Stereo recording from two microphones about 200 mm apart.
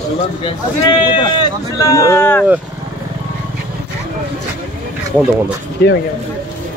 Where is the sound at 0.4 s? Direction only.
25° left (ahead or behind).